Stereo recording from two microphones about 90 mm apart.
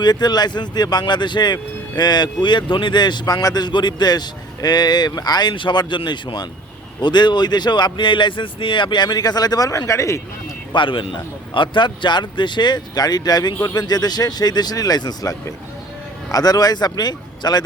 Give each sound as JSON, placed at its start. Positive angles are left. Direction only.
{"t": 0.0, "sound": "speech", "side_deg": 50}
{"t": 10.7, "sound": "speech", "side_deg": 65}